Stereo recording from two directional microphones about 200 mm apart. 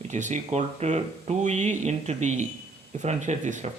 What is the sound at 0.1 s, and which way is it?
Speech, 35° right (ahead or behind).